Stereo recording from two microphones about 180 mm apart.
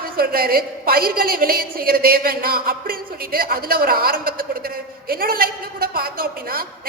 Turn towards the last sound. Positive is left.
turn(degrees=-55)  # may be behind; listen again after turning